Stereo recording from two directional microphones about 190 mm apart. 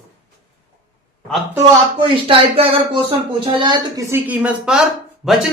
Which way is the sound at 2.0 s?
30° right (ahead or behind).